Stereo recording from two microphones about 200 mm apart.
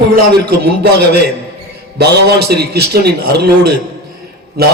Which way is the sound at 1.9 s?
55° right (ahead or behind).